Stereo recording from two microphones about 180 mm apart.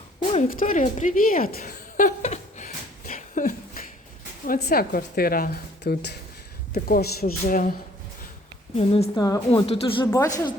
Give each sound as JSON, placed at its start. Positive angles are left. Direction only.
{"t": 0.4, "sound": "a sound", "side_deg": 45}
{"t": 4.4, "sound": "a woman's voice", "side_deg": 60}
{"t": 6.7, "sound": "a woman's voice", "side_deg": 60}
{"t": 8.7, "sound": "a woman's voice", "side_deg": 35}
{"t": 9.1, "sound": "a woman's voice", "side_deg": 20}